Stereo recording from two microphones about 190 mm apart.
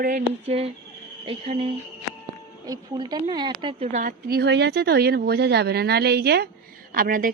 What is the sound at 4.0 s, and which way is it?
A woman's voice, 50° right (ahead or behind).